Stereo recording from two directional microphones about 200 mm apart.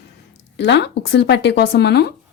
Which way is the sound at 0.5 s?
60° left (ahead or behind).